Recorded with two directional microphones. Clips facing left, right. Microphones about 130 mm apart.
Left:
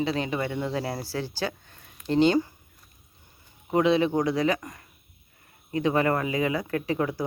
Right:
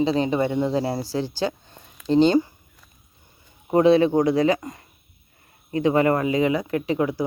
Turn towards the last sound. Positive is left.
turn(degrees=-15)  # may be behind; listen again after turning